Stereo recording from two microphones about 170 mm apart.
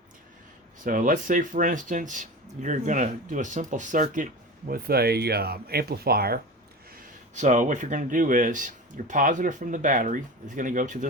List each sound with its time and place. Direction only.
0.9 s speech: 55° right (ahead or behind)
4.7 s speech: 65° right (ahead or behind)
7.3 s speech: 45° right (ahead or behind)